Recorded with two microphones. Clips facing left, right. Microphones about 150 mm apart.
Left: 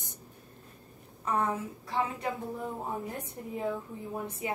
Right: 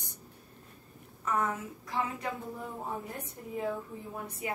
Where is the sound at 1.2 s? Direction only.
30° left (ahead or behind).